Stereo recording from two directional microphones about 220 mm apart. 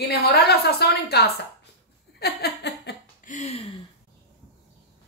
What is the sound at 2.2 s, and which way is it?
Laughter, 45° left (ahead or behind).